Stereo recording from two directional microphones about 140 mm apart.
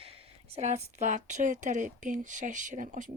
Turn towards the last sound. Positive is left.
turn(degrees=-70)  # may be behind; listen again after turning